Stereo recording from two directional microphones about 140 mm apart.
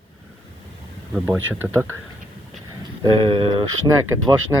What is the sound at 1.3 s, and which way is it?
Speech, 15° right (ahead or behind).